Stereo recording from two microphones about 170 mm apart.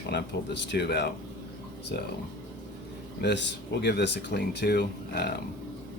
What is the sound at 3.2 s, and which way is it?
Speech, 90° left.